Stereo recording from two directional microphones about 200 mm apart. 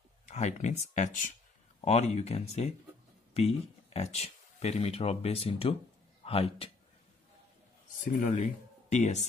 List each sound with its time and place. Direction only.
0.3 s a man's voice: 35° left (ahead or behind)
8.0 s speech: 40° left (ahead or behind)